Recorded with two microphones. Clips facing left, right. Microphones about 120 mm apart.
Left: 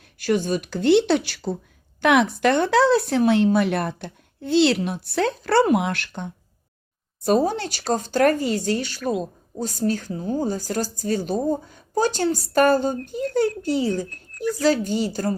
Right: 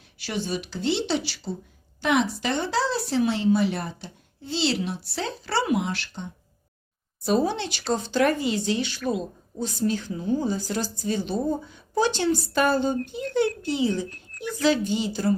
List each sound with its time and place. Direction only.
0.2 s speech: 50° left (ahead or behind)
7.3 s speech: 45° left (ahead or behind)